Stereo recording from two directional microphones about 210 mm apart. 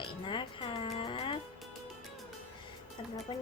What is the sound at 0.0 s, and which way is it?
Music, 25° left (ahead or behind).